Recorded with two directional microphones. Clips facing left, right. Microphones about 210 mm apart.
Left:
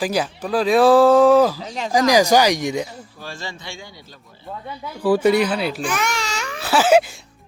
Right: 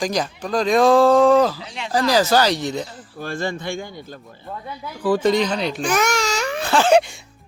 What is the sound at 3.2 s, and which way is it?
Speech, 55° right (ahead or behind).